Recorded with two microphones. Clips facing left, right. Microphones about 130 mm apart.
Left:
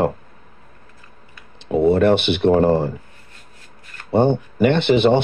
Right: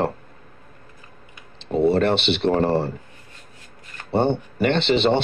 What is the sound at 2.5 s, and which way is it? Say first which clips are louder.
Speech: left 5 dB; 15° left (ahead or behind).